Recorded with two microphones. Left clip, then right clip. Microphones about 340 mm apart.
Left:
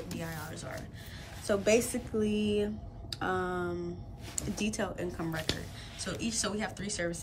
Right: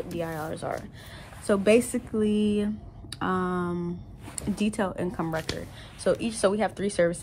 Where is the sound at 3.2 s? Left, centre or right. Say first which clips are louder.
Right 4 dB; right.